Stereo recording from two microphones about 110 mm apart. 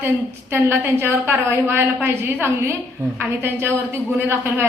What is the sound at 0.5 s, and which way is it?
A woman's voice, 20° right (ahead or behind).